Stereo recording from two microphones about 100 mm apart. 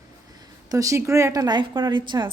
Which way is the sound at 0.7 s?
35° right (ahead or behind).